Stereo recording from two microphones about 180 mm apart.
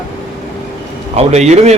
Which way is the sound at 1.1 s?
40° right (ahead or behind).